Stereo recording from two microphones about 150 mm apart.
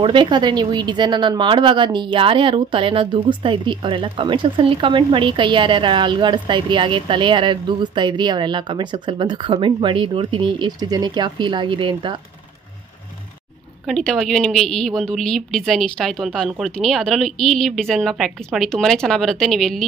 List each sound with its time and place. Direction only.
0.0 s speech: 30° right (ahead or behind)
13.8 s a woman's voice: centre (ahead or behind)